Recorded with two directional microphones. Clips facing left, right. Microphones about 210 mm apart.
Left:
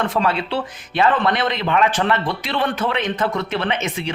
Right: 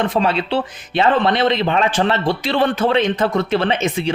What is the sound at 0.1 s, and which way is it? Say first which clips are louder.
Speech: right 3 dB; 20° right (ahead or behind).